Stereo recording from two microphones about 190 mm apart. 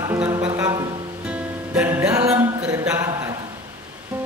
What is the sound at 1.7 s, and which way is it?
Music, 5° right (ahead or behind).